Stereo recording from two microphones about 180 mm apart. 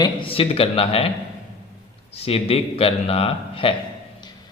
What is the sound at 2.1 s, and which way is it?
Speech, 35° left (ahead or behind).